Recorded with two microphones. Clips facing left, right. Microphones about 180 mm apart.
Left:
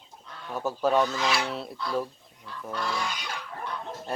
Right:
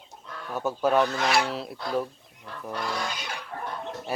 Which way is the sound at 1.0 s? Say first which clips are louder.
Right 3 dB; 60° right (ahead or behind).